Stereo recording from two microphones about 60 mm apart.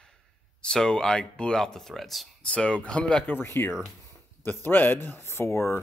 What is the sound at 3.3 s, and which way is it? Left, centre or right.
A man's voice, left.